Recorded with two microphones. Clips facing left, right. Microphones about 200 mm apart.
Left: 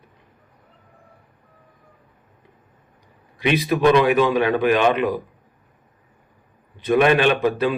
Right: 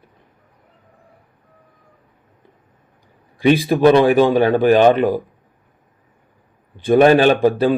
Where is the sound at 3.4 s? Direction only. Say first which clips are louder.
Right 5 dB; 30° right (ahead or behind).